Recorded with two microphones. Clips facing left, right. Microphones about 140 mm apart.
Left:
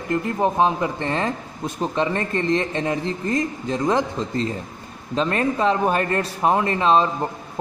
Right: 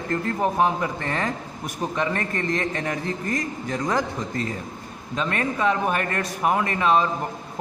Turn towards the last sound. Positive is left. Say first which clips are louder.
# left 3 dB
turn(degrees=30)  # may be behind; listen again after turning